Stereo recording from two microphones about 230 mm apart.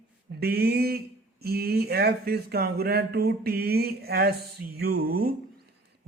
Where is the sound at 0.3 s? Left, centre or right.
Right.